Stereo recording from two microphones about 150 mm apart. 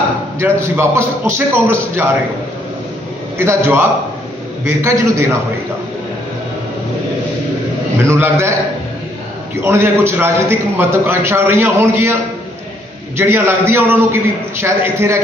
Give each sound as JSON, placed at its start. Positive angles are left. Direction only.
{"t": 0.4, "sound": "a man's voice", "side_deg": -15}
{"t": 3.3, "sound": "a man's voice", "side_deg": -15}
{"t": 8.1, "sound": "a man's voice", "side_deg": -20}
{"t": 9.6, "sound": "a man's voice", "side_deg": -15}
{"t": 13.2, "sound": "a man's voice", "side_deg": -15}